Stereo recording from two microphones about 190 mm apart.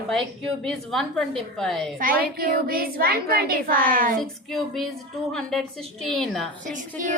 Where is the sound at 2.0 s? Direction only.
50° right (ahead or behind).